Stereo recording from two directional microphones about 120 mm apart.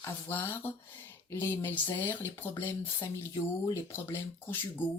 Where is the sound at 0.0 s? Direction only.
20° left (ahead or behind).